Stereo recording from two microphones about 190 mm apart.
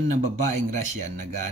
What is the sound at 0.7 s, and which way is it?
Speech, 40° right (ahead or behind).